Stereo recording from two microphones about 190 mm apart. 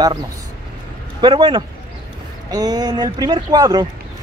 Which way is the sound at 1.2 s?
25° right (ahead or behind).